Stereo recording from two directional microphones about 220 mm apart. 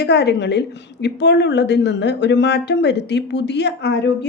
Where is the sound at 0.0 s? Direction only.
50° left (ahead or behind).